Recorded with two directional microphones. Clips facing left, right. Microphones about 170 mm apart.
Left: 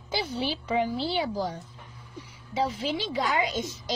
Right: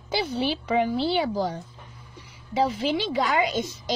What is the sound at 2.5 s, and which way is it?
A woman's voice, 70° right (ahead or behind).